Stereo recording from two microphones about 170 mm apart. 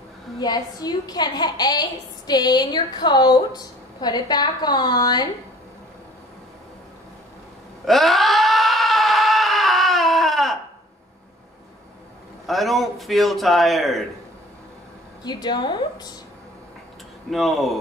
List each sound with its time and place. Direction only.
0.4 s a woman's voice: 25° left (ahead or behind)
7.8 s a sound: centre (ahead or behind)
12.4 s a man's voice: centre (ahead or behind)
15.2 s a woman's voice: 25° left (ahead or behind)
17.3 s a man's voice: centre (ahead or behind)